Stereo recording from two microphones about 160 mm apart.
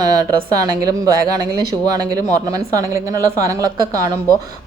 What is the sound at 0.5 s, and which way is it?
A woman's voice, 20° right (ahead or behind).